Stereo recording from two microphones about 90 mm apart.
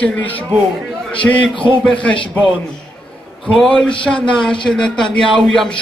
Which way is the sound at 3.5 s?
5° left (ahead or behind).